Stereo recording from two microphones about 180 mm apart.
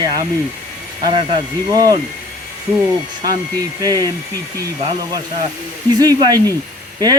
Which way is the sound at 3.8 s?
20° right (ahead or behind).